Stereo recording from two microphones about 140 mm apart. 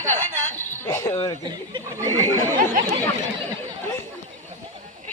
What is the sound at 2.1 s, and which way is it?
Speech, 15° left (ahead or behind).